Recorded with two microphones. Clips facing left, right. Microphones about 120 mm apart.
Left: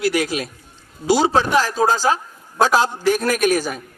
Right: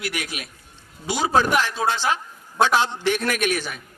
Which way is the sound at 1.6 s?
40° left (ahead or behind).